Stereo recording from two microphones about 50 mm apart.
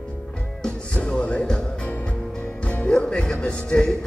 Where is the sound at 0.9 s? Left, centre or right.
Left.